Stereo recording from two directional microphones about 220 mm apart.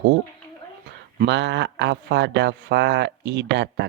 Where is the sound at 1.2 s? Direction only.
55° right (ahead or behind).